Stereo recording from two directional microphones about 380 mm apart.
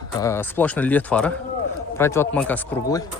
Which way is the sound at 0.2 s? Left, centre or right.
Centre.